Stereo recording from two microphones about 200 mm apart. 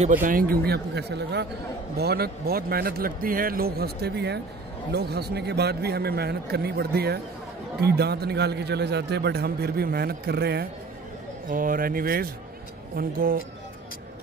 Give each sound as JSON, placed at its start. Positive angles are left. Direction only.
{"t": 0.0, "sound": "speech", "side_deg": -40}
{"t": 11.4, "sound": "speech", "side_deg": -45}